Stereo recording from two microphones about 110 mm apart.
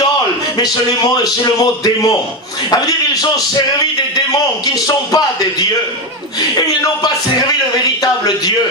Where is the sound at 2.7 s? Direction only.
40° left (ahead or behind).